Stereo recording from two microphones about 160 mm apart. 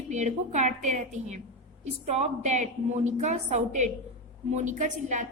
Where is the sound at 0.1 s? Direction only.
50° right (ahead or behind).